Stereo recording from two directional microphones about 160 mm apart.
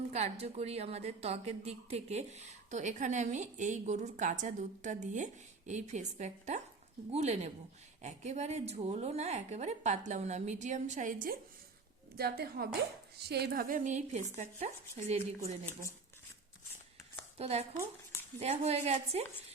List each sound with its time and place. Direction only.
0.1 s a woman's voice: 40° right (ahead or behind)
12.1 s a woman's voice: 75° right (ahead or behind)
13.1 s a woman's voice: 90° right; by 15.2 s 45° right (ahead or behind)
17.3 s speech: 40° right (ahead or behind)